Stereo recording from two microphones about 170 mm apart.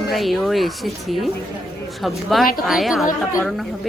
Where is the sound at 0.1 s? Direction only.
Centre (ahead or behind).